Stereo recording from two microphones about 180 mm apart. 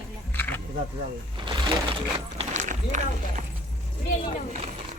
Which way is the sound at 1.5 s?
25° right (ahead or behind).